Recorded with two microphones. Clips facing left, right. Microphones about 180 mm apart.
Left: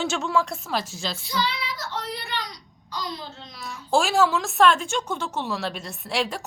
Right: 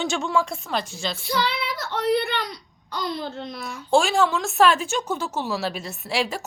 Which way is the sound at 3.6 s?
Centre (ahead or behind).